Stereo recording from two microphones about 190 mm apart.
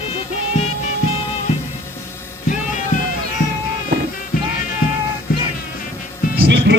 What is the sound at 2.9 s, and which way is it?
Music, 40° left (ahead or behind).